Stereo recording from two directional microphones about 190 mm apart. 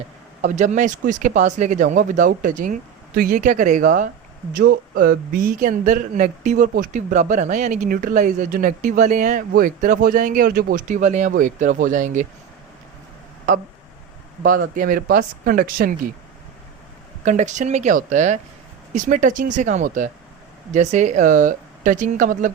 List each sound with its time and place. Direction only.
0.4 s speech: 40° right (ahead or behind)
14.4 s speech: 45° right (ahead or behind)
17.2 s speech: 40° right (ahead or behind)